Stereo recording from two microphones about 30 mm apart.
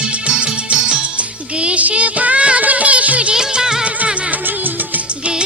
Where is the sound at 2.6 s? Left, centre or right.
Right.